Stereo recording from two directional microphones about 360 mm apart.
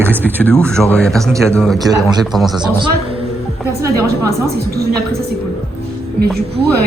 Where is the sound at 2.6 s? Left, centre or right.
Centre.